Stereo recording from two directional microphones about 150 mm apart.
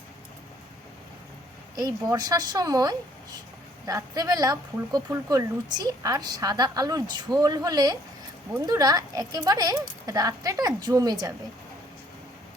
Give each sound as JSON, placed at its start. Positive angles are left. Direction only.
{"t": 1.7, "sound": "speech", "side_deg": -25}